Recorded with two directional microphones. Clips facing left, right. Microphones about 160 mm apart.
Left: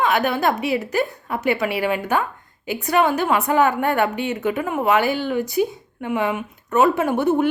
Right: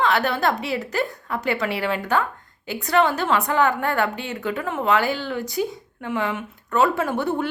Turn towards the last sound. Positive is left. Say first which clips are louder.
# left 5 dB
turn(degrees=20)  # may be behind; listen again after turning